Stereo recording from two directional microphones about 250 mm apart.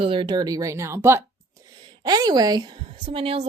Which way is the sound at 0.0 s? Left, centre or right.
Right.